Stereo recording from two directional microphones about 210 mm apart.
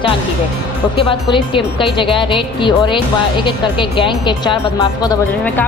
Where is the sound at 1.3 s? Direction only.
25° left (ahead or behind).